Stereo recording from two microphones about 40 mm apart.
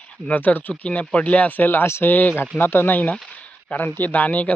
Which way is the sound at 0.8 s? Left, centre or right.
Left.